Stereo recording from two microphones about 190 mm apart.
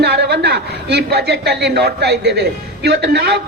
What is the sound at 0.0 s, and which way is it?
A man's voice, 60° right (ahead or behind).